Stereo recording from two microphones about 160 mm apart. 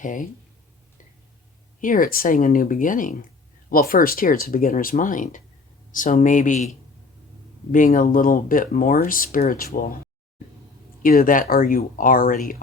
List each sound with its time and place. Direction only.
0.0 s speech: 55° left (ahead or behind)
1.8 s speech: 60° left (ahead or behind)
7.7 s speech: 55° left (ahead or behind)
11.0 s speech: 60° left (ahead or behind)